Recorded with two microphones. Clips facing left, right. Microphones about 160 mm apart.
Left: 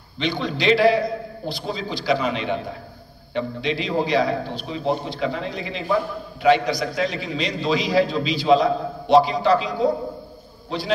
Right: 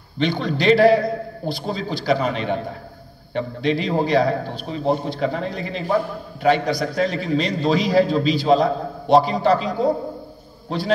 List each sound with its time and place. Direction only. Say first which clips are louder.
0.2 s a man's voice: right 3 dB; 45° right (ahead or behind)